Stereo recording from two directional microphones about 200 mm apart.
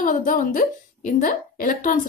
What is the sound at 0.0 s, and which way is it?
A woman's voice, 40° left (ahead or behind).